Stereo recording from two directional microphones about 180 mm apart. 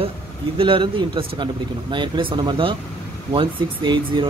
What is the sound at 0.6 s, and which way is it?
Speech, 30° right (ahead or behind).